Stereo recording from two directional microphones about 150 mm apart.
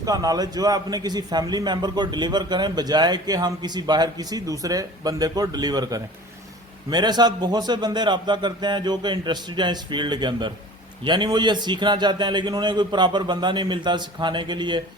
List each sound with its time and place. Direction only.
0.0 s a man's voice: 25° right (ahead or behind)